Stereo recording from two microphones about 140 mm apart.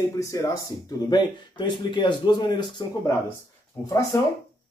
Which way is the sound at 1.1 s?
30° left (ahead or behind).